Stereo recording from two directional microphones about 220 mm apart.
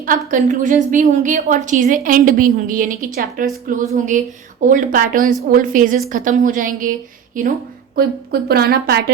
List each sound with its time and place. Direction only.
0.3 s a woman's voice: 35° right (ahead or behind)